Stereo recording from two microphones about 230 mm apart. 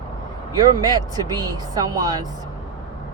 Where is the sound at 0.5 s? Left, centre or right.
Centre.